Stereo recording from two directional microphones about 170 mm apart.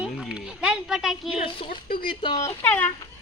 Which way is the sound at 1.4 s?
30° left (ahead or behind).